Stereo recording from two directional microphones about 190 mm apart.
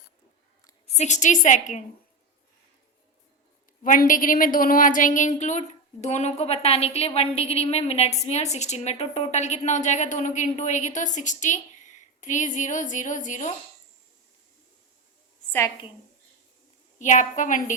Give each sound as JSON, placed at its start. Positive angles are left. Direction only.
{"t": 0.9, "sound": "a woman's voice", "side_deg": 40}
{"t": 3.8, "sound": "a woman's voice", "side_deg": 45}
{"t": 17.0, "sound": "a woman's voice", "side_deg": 40}